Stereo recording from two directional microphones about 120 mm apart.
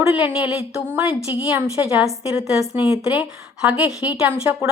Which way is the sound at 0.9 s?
15° right (ahead or behind).